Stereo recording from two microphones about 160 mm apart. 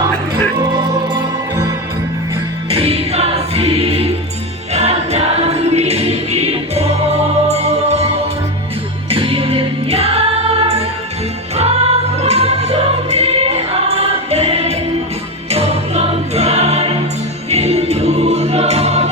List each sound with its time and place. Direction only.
2.7 s music: 40° right (ahead or behind)
4.7 s choir: 40° right (ahead or behind)
9.0 s music: 35° right (ahead or behind)